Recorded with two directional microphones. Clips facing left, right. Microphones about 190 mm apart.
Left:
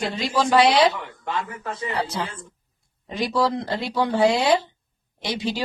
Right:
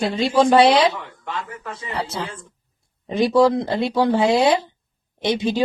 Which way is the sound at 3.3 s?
20° right (ahead or behind).